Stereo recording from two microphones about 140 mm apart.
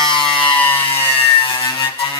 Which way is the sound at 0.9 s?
40° left (ahead or behind).